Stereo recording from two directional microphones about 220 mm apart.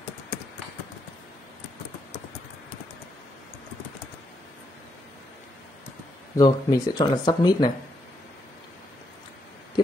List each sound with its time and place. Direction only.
6.3 s speech: 15° left (ahead or behind)